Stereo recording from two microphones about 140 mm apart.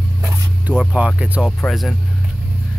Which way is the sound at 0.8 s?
5° right (ahead or behind).